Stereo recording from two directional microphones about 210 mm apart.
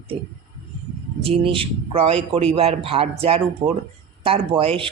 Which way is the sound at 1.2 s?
25° right (ahead or behind).